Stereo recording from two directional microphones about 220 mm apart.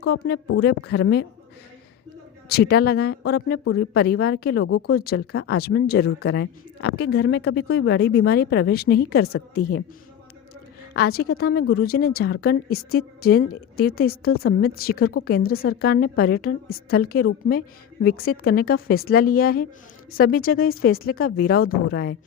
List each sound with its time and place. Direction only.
0.0 s speech: 45° left (ahead or behind)
2.5 s speech: 45° left (ahead or behind)
3.6 s speech: 65° left (ahead or behind)
3.9 s speech: 45° left (ahead or behind)
10.9 s speech: 45° left (ahead or behind)